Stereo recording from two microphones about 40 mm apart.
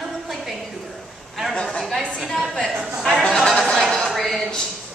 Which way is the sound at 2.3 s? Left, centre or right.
Centre.